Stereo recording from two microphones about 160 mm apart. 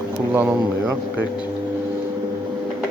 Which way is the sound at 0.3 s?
15° right (ahead or behind).